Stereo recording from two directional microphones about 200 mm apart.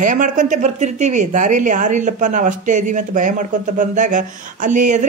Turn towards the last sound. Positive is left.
turn(degrees=-40)  # may be behind; listen again after turning